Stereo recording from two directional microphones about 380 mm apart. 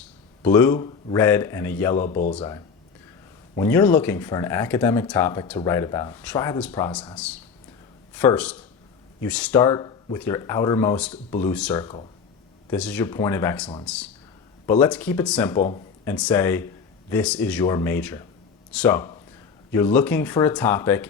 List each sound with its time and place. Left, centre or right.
0.4 s speech: centre
2.0 s speech: centre
3.5 s speech: centre